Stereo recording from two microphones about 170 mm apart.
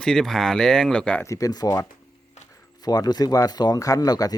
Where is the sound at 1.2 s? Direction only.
20° left (ahead or behind).